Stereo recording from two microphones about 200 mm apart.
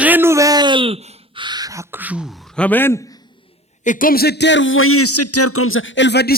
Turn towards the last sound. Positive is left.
turn(degrees=60)  # may be behind; listen again after turning